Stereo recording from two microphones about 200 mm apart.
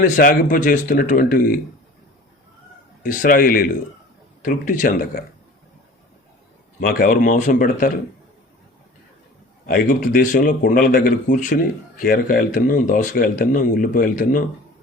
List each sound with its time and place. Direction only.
0.0 s speech: 45° left (ahead or behind)
3.0 s speech: 45° left (ahead or behind)
6.7 s speech: 50° left (ahead or behind)
9.6 s speech: 45° left (ahead or behind)